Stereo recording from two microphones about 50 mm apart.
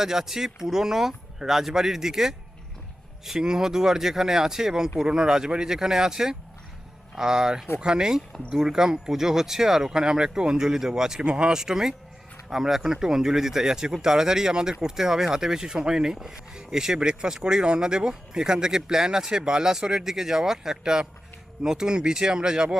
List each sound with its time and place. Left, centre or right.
0.0 s speech: centre